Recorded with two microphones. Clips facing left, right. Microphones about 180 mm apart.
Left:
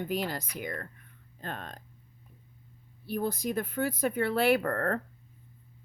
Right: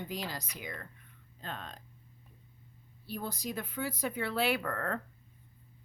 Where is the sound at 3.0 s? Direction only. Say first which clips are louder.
Left 7 dB; 55° left (ahead or behind).